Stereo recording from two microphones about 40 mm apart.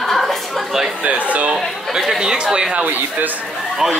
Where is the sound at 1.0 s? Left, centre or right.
Right.